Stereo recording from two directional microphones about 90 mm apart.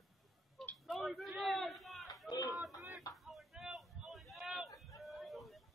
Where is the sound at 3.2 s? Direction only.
Centre (ahead or behind).